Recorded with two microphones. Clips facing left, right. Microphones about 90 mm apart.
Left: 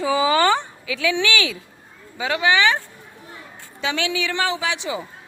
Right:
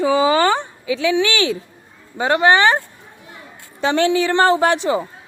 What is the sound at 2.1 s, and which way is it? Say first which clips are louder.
A woman's voice: right 5 dB; 40° right (ahead or behind).